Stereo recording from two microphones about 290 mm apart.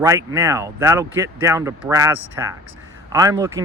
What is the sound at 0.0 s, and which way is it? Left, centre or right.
Speech, centre.